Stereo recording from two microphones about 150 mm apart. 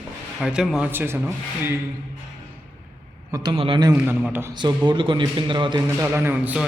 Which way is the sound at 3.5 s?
35° right (ahead or behind).